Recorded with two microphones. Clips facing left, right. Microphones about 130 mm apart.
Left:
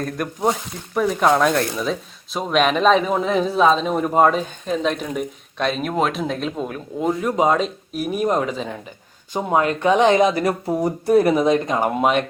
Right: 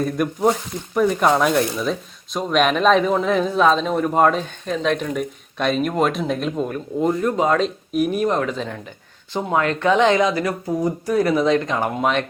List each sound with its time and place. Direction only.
0.0 s speech: centre (ahead or behind)
9.5 s speech: 20° left (ahead or behind)